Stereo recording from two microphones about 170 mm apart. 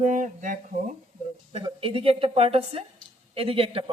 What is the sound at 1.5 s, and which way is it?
Speech, 35° right (ahead or behind).